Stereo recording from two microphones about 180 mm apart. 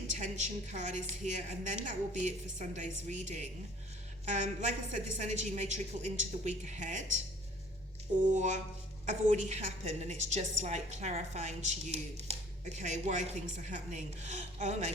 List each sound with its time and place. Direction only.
0.2 s a woman's voice: 40° right (ahead or behind)
8.3 s a woman's voice: 40° right (ahead or behind)